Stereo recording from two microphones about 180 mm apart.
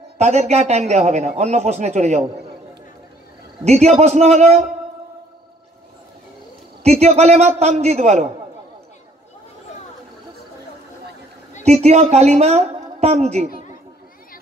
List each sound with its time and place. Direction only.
0.2 s a man's voice: 40° right (ahead or behind)
3.6 s a man's voice: 35° right (ahead or behind)
6.8 s a man's voice: 35° right (ahead or behind)
11.6 s a man's voice: 35° right (ahead or behind)